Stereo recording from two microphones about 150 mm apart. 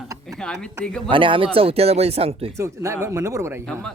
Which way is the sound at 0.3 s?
5° left (ahead or behind).